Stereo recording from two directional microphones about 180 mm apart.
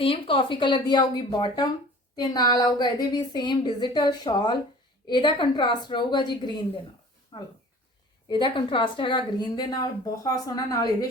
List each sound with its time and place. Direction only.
0.0 s a woman's voice: 30° left (ahead or behind)